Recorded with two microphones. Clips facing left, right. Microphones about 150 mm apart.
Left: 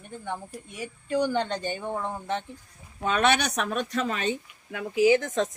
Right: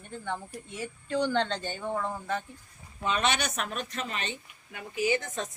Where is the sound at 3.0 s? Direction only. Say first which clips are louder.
Left 5 dB; 55° left (ahead or behind).